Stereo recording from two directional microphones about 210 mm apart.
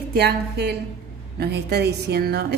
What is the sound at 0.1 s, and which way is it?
A woman's voice, 50° right (ahead or behind).